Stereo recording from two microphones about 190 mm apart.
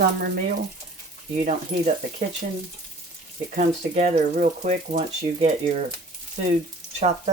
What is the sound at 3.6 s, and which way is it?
Speech, 40° right (ahead or behind).